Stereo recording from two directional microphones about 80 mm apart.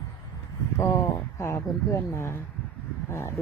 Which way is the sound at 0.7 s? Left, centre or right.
Left.